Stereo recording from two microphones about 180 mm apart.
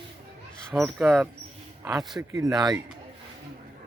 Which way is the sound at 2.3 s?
20° right (ahead or behind).